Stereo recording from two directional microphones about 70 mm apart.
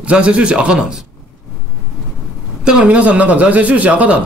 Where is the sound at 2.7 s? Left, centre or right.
Centre.